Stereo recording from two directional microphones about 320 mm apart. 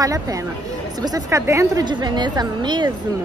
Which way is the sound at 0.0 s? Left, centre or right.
Centre.